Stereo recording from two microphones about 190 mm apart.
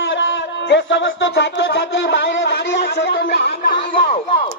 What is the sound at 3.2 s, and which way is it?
Chatter, 60° left (ahead or behind).